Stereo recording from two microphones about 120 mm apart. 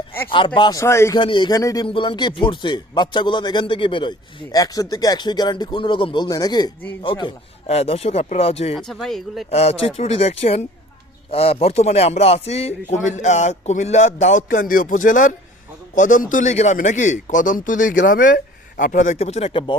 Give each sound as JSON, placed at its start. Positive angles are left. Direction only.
{"t": 0.3, "sound": "speech", "side_deg": 45}
{"t": 1.1, "sound": "speech", "side_deg": 40}
{"t": 1.5, "sound": "speech", "side_deg": 25}
{"t": 1.8, "sound": "speech", "side_deg": 45}
{"t": 4.5, "sound": "speech", "side_deg": 30}
{"t": 6.2, "sound": "speech", "side_deg": 35}
{"t": 7.7, "sound": "speech", "side_deg": 60}
{"t": 8.7, "sound": "speech", "side_deg": 0}
{"t": 9.5, "sound": "speech", "side_deg": 60}
{"t": 11.3, "sound": "a sound", "side_deg": 55}
{"t": 16.0, "sound": "a man's voice", "side_deg": 90}
{"t": 18.8, "sound": "a sound", "side_deg": 90}